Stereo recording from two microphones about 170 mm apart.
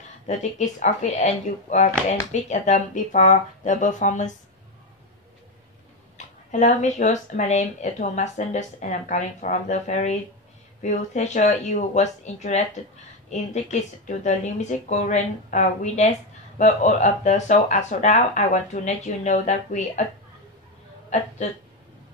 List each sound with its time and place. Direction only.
0.3 s speech: 45° left (ahead or behind)
6.1 s speech: 45° left (ahead or behind)